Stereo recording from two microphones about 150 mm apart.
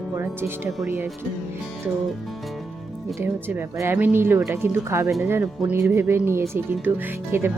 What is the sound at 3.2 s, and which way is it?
Speech, 15° right (ahead or behind).